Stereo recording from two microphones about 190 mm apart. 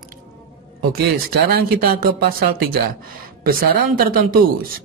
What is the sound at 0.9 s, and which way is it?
Speech, 55° right (ahead or behind).